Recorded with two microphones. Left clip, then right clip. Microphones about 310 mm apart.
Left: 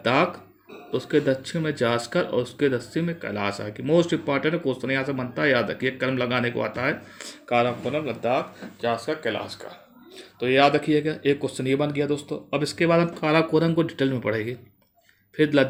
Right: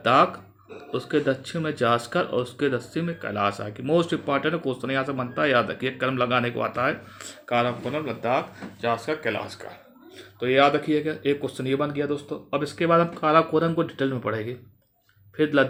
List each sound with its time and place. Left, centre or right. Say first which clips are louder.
1.1 s speech: left 2 dB; centre
10.2 s speech: even; centre